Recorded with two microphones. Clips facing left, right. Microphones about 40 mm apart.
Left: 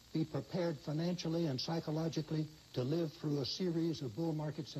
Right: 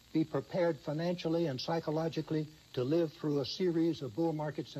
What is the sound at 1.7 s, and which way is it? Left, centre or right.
Speech, centre.